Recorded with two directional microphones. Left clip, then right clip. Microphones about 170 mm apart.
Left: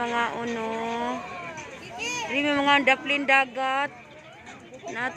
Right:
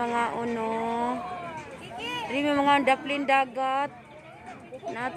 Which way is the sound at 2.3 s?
Centre (ahead or behind).